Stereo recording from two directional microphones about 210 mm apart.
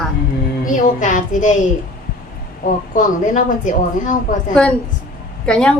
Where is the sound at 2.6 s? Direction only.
40° left (ahead or behind).